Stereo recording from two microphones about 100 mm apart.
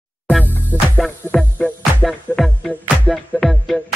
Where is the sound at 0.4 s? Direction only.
20° right (ahead or behind).